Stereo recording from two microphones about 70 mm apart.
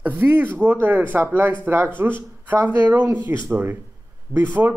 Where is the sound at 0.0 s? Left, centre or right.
Right.